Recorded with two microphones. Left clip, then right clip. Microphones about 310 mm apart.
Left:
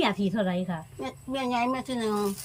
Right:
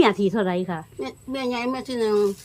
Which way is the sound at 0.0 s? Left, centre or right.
Centre.